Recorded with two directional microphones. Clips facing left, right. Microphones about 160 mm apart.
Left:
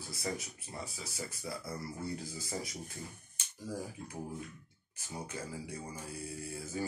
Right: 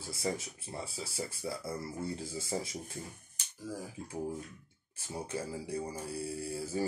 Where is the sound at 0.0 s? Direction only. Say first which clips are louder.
Right 3 dB; 25° right (ahead or behind).